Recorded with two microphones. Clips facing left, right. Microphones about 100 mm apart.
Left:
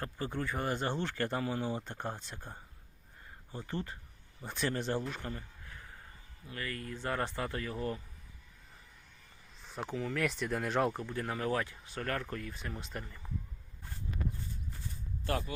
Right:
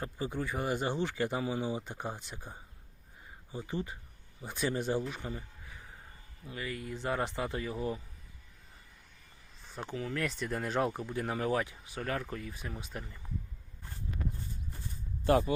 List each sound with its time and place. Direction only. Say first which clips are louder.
0.0 s speech: right 1 dB; 10° right (ahead or behind)
9.6 s speech: left 1 dB; centre (ahead or behind)
11.0 s speech: right 2 dB; 15° right (ahead or behind)
15.2 s speech: right 9 dB; 20° right (ahead or behind)